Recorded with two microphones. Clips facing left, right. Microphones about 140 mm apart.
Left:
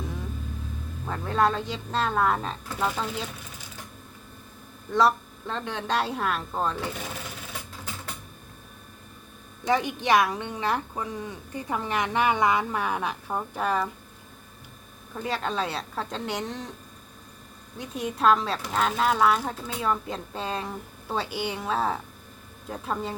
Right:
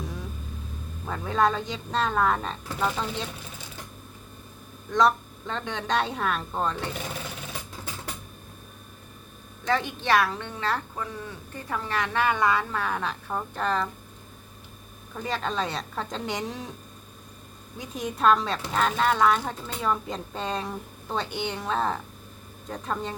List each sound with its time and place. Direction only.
1.0 s speech: centre (ahead or behind)
4.9 s speech: 5° left (ahead or behind)
9.6 s a woman's voice: 15° left (ahead or behind)
15.1 s speech: centre (ahead or behind)
17.7 s speech: centre (ahead or behind)